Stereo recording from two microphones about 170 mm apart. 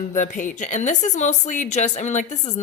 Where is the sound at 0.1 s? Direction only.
50° left (ahead or behind).